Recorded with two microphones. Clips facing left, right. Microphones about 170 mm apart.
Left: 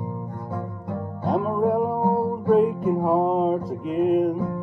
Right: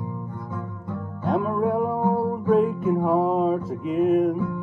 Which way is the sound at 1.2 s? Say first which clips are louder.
Even; 35° left (ahead or behind).